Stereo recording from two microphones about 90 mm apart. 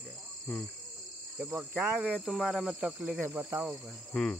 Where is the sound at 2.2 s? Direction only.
5° right (ahead or behind).